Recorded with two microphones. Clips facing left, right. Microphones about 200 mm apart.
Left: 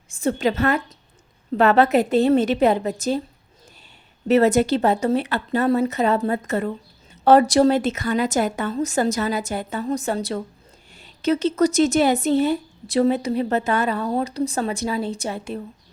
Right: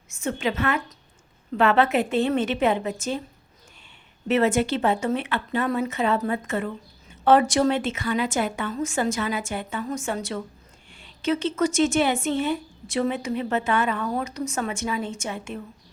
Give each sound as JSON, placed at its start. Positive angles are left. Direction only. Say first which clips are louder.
{"t": 0.1, "sound": "speech", "louder": "left 5 dB", "side_deg": 35}
{"t": 4.3, "sound": "speech", "louder": "left 5 dB", "side_deg": 40}